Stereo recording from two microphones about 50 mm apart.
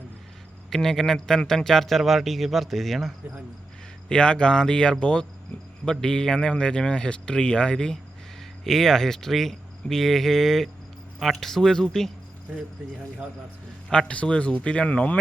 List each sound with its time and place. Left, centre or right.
0.7 s a man's voice: centre
4.1 s a man's voice: centre
14.1 s speech: left